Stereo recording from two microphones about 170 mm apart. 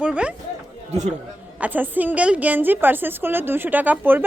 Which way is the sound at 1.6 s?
10° right (ahead or behind).